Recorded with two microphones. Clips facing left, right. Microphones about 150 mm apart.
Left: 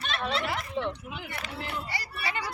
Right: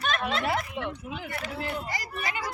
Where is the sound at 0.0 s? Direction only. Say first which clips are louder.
Right 2 dB; 45° right (ahead or behind).